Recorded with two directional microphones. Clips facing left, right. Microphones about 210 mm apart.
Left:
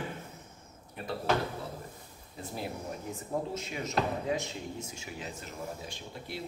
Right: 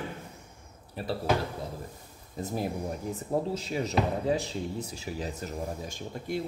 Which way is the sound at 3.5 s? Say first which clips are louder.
Right 4 dB; 35° right (ahead or behind).